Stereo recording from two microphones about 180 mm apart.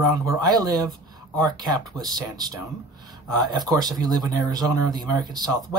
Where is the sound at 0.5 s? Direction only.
20° right (ahead or behind).